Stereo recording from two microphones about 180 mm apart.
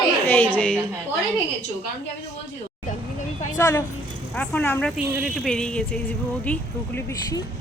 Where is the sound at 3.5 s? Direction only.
15° left (ahead or behind).